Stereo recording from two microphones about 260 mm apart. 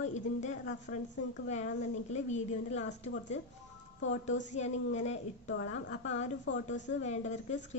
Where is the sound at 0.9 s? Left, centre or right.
Left.